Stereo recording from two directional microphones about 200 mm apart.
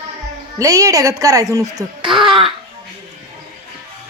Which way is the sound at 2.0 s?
Centre (ahead or behind).